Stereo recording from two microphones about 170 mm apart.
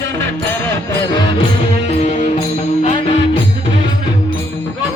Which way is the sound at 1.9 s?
45° left (ahead or behind).